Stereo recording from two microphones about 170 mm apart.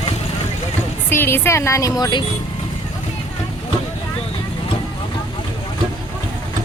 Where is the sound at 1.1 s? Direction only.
15° left (ahead or behind).